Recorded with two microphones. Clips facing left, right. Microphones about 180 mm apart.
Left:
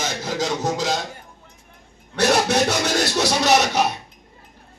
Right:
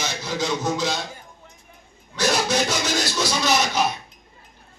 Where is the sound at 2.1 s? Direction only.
65° left (ahead or behind).